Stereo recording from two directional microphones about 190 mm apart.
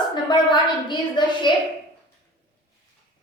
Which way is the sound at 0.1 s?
25° left (ahead or behind).